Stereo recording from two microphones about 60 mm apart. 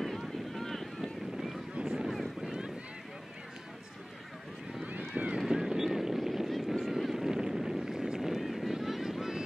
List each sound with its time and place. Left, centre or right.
0.0 s boat: centre
5.1 s boat: right
5.4 s vehicle: centre